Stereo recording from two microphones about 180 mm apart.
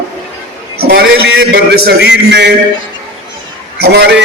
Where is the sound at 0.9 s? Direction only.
70° right (ahead or behind).